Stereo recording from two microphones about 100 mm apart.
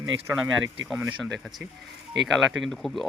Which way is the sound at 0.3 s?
5° right (ahead or behind).